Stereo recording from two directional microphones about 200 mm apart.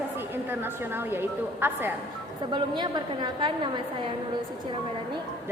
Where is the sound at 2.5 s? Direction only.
20° right (ahead or behind).